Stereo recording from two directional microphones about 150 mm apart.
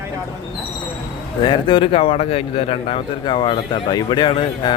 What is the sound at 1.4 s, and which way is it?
A man's voice, 35° left (ahead or behind).